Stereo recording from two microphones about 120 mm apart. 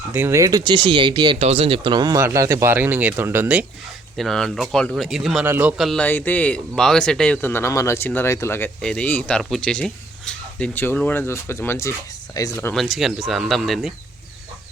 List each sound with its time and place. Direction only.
0.1 s speech: 20° right (ahead or behind)
0.6 s speech: 40° right (ahead or behind)
1.4 s speech: 60° right (ahead or behind); by 3.7 s 15° right (ahead or behind)
4.2 s a man's voice: 5° left (ahead or behind); by 5.8 s 10° right (ahead or behind)
5.8 s speech: 5° left (ahead or behind)
6.1 s speech: 15° left (ahead or behind)
7.4 s speech: 20° left (ahead or behind)
8.8 s speech: 5° left (ahead or behind); by 12.5 s 30° left (ahead or behind)
12.7 s speech: centre (ahead or behind)